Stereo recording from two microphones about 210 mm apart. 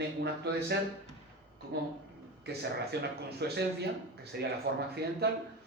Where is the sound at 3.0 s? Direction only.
50° right (ahead or behind).